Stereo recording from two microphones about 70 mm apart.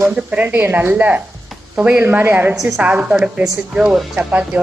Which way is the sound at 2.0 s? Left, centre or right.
Right.